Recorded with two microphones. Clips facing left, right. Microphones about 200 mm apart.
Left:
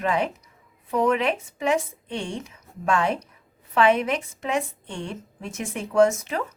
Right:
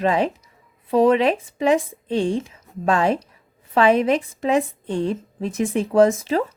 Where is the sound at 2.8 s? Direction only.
35° right (ahead or behind).